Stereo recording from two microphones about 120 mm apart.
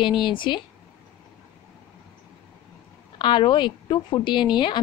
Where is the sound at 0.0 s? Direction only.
40° left (ahead or behind).